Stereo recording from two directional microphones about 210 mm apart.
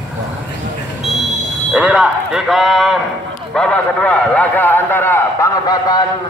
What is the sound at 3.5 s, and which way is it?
A man's voice, 5° left (ahead or behind).